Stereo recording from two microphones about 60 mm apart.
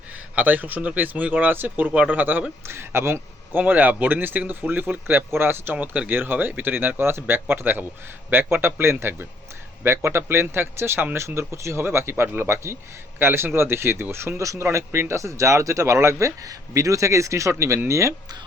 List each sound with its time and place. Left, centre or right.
0.3 s speech: right
2.6 s speech: right
3.6 s speech: right
5.8 s speech: right